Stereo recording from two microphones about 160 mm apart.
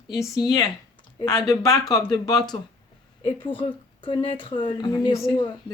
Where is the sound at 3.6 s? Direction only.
30° left (ahead or behind).